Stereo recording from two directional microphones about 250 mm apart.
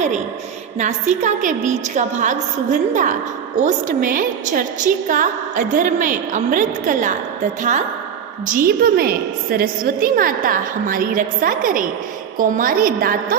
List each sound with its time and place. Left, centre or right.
0.8 s a woman's voice: right
8.4 s a woman's voice: right